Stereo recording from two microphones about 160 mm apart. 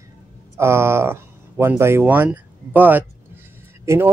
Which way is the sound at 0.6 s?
15° right (ahead or behind).